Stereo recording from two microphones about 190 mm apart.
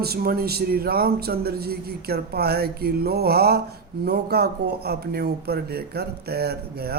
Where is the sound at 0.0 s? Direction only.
55° right (ahead or behind).